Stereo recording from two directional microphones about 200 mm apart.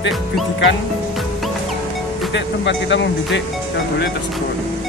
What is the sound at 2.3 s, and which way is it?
Speech, 60° left (ahead or behind).